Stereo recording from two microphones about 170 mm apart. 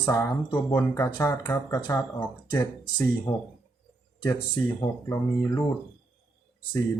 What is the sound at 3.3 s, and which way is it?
Speech, 15° left (ahead or behind).